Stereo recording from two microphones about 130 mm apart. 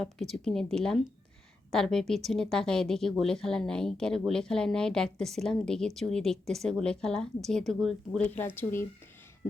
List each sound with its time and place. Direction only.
0.0 s speech: centre (ahead or behind)
8.4 s speech: 15° left (ahead or behind)